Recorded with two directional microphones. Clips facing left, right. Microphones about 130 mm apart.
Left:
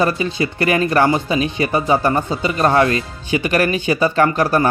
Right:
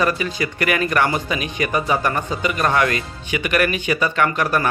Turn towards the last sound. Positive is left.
turn(degrees=30)  # may be behind; listen again after turning